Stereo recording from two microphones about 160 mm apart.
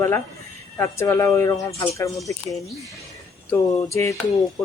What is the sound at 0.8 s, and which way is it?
Speech, 15° left (ahead or behind).